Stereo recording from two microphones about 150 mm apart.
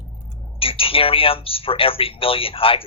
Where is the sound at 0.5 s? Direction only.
40° left (ahead or behind).